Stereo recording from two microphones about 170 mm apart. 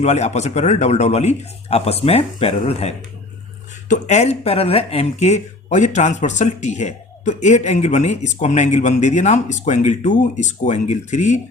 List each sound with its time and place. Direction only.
0.0 s speech: 40° left (ahead or behind)